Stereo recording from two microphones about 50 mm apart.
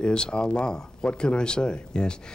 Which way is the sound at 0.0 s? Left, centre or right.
Centre.